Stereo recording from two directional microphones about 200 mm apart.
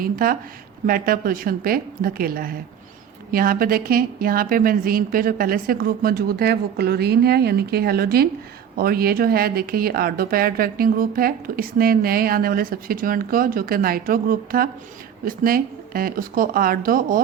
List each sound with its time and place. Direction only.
0.0 s speech: 45° right (ahead or behind)